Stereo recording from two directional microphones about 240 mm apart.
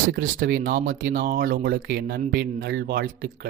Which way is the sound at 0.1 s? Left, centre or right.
Right.